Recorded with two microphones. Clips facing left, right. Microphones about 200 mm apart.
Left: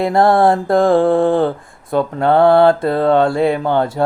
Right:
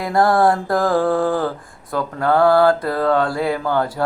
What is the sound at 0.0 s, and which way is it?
Mantra, 25° left (ahead or behind).